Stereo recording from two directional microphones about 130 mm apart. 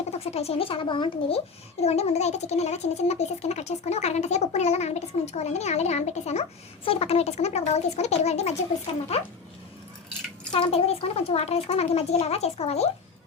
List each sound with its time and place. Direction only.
0.1 s a child's voice: 55° left (ahead or behind); by 1.4 s 40° left (ahead or behind)
1.8 s a child's voice: 55° left (ahead or behind)
10.5 s a child's voice: 45° left (ahead or behind)